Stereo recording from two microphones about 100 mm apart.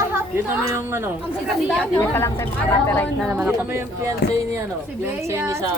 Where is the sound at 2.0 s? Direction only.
25° left (ahead or behind).